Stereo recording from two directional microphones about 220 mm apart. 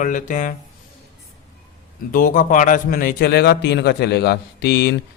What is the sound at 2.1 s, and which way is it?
A man's voice, 35° left (ahead or behind).